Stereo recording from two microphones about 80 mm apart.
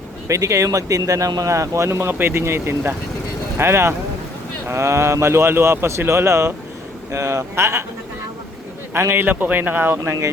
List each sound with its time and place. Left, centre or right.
0.3 s speech: right
8.9 s speech: right